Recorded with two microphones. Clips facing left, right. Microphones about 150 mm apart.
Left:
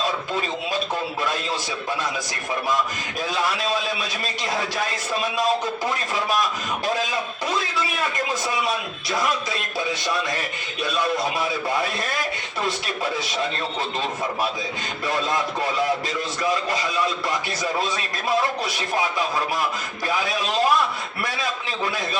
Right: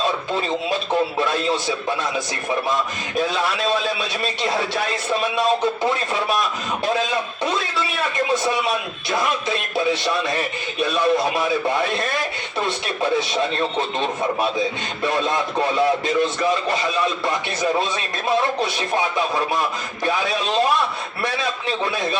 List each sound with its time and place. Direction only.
3.2 s speech: centre (ahead or behind)
8.3 s speech: centre (ahead or behind)
11.0 s speech: centre (ahead or behind)
15.0 s speech: 25° right (ahead or behind)
17.2 s speech: 25° right (ahead or behind)